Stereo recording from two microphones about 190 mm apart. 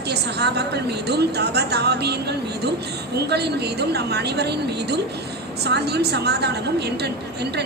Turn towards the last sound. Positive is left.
turn(degrees=-60)  # may be behind; listen again after turning